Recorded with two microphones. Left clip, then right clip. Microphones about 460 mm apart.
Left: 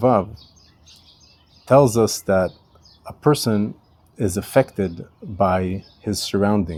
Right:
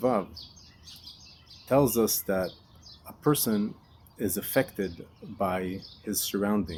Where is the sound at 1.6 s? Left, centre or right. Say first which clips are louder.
Left 9 dB; left.